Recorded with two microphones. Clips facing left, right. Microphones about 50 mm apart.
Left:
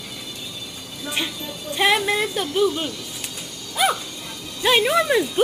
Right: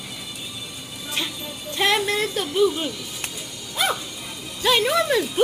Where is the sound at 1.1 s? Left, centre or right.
Centre.